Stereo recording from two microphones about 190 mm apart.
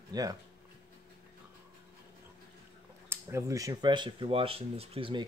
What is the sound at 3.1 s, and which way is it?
Speech, 15° right (ahead or behind).